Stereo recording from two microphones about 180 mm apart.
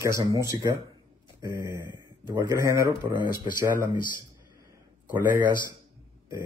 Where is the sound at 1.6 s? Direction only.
25° left (ahead or behind).